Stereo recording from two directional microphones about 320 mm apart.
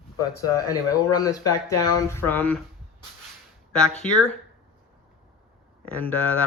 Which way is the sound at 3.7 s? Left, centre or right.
Centre.